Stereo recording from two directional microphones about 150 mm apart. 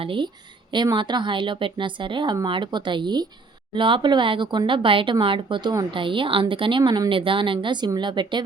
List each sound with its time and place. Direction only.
0.0 s a woman's voice: 35° right (ahead or behind)